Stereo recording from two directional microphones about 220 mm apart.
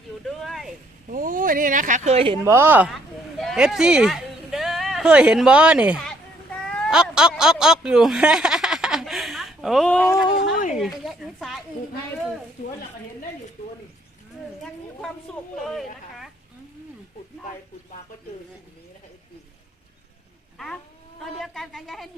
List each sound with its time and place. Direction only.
0.3 s a sound: centre (ahead or behind)
1.1 s speech: 40° right (ahead or behind)
2.4 s speech: 10° right (ahead or behind)
6.7 s a sound: 5° left (ahead or behind)
10.8 s speech: centre (ahead or behind)
21.3 s speech: centre (ahead or behind)